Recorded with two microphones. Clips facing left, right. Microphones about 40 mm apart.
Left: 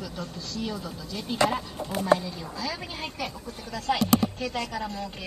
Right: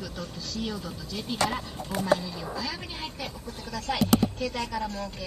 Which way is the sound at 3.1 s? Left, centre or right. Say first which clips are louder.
Left 3 dB; left.